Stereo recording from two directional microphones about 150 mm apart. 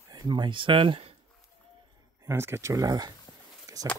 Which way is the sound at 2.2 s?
15° right (ahead or behind).